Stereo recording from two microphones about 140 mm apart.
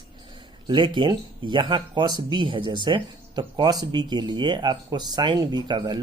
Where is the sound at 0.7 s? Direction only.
35° right (ahead or behind).